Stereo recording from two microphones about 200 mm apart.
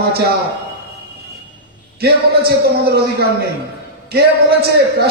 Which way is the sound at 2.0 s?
50° right (ahead or behind).